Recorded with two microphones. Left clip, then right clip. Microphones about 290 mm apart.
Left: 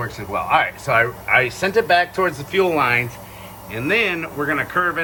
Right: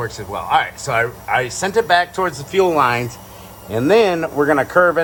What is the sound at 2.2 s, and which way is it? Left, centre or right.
Speech, centre.